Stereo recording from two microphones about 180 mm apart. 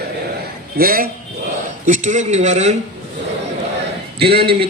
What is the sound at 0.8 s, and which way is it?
Speech, 55° right (ahead or behind).